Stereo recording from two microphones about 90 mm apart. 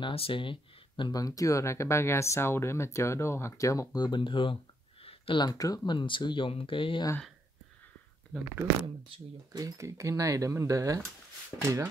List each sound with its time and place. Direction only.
0.0 s speech: 80° left
1.1 s speech: 40° left (ahead or behind); by 4.6 s 70° left (ahead or behind)
5.0 s a sound: 90° left
5.4 s speech: 45° left (ahead or behind)
5.9 s speech: 65° left (ahead or behind)
9.5 s speech: 40° right (ahead or behind)
11.6 s speech: 25° right (ahead or behind)